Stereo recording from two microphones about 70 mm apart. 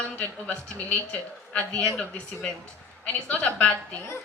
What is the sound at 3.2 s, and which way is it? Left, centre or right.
Speech, centre.